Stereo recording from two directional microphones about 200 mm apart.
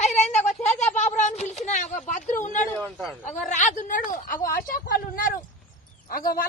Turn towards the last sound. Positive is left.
turn(degrees=45)  # may be behind; listen again after turning